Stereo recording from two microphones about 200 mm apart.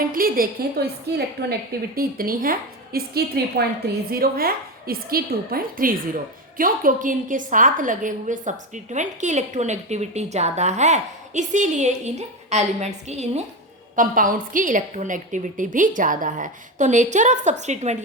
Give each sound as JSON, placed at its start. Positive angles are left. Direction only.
{"t": 0.1, "sound": "a woman's voice", "side_deg": -45}